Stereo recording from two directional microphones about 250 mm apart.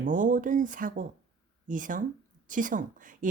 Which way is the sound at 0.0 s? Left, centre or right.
Right.